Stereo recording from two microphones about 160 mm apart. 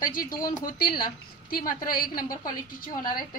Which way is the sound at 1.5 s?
60° left (ahead or behind).